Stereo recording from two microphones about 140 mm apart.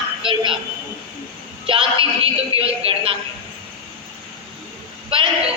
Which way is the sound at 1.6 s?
40° right (ahead or behind).